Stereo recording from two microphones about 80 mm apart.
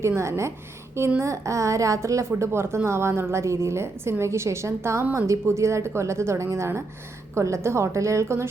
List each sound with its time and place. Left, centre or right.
0.0 s a woman's voice: right